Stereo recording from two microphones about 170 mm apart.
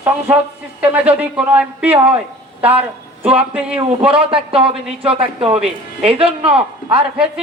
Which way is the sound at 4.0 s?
30° right (ahead or behind).